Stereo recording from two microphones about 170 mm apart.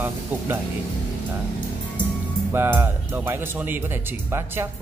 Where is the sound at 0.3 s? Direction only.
10° right (ahead or behind).